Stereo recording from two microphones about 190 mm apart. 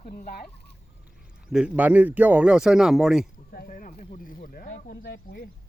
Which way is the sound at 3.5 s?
45° left (ahead or behind).